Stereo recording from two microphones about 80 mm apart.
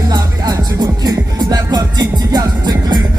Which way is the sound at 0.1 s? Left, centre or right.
Right.